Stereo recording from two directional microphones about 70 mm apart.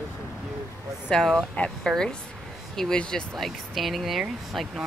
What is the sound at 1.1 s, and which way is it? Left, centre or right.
Speech, centre.